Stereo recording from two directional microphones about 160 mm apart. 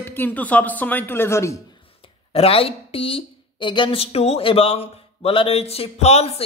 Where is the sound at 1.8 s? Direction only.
35° left (ahead or behind).